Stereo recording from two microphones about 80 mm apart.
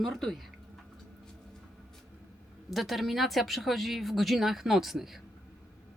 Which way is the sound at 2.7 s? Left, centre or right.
Centre.